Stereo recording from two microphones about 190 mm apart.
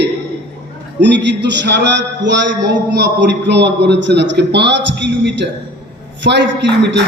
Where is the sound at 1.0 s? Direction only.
65° right (ahead or behind).